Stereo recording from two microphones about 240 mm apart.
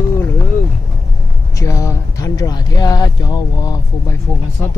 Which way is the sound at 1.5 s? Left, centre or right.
Centre.